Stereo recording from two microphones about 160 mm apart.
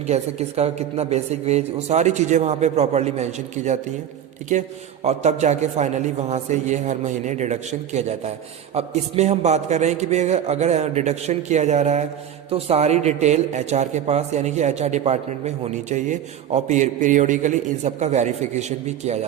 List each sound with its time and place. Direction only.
0.1 s a man's voice: 40° right (ahead or behind)
5.0 s a man's voice: 45° right (ahead or behind)